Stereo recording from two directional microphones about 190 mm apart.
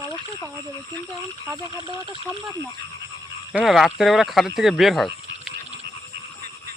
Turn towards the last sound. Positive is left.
turn(degrees=0)  # may be behind; listen again after turning